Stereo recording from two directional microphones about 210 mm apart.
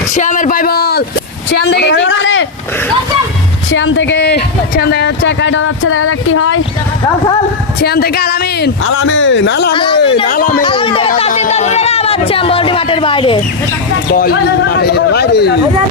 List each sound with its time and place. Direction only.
0.1 s a woman's voice: 35° left (ahead or behind); by 2.5 s 65° left (ahead or behind)
3.7 s speech: 65° left (ahead or behind)
7.8 s a woman's voice: 50° left (ahead or behind)
9.7 s speech: 25° left (ahead or behind)
10.2 s speech: 40° left (ahead or behind)
10.6 s speech: 25° left (ahead or behind)
14.1 s a woman's voice: 50° left (ahead or behind)